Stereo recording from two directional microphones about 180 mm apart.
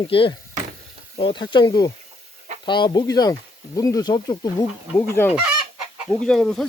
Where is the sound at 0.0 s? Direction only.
30° left (ahead or behind).